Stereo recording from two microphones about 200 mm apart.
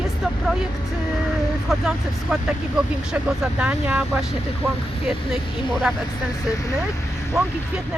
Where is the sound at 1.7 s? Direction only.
Centre (ahead or behind).